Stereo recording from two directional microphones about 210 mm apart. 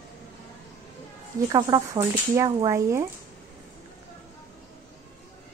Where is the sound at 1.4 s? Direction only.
20° right (ahead or behind).